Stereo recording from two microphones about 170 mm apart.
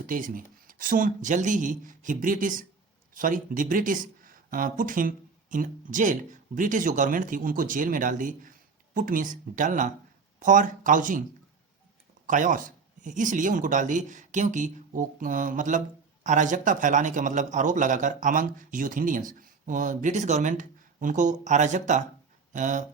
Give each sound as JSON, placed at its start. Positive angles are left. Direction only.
{"t": 0.0, "sound": "speech", "side_deg": -55}
{"t": 12.2, "sound": "speech", "side_deg": -50}